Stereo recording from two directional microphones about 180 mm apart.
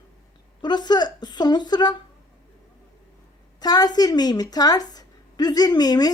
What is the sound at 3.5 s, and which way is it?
Speech, 20° left (ahead or behind).